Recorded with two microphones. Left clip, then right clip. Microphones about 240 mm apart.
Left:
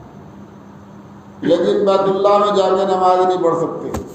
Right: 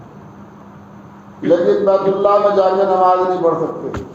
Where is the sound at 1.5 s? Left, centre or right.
Left.